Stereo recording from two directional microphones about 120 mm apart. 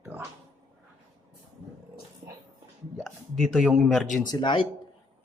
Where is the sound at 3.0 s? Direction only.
Centre (ahead or behind).